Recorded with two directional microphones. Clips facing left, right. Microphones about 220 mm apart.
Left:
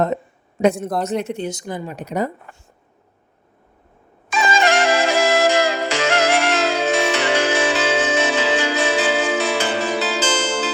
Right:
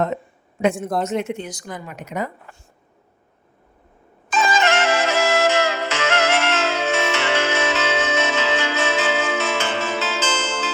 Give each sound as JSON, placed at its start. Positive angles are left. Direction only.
{"t": 0.6, "sound": "speech", "side_deg": 40}
{"t": 4.5, "sound": "music", "side_deg": 35}